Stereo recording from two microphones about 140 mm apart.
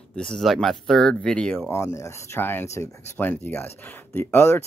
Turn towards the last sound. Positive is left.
turn(degrees=15)  # may be behind; listen again after turning